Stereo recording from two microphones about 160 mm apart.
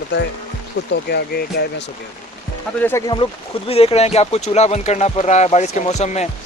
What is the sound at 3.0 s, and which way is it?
Speech, 20° left (ahead or behind).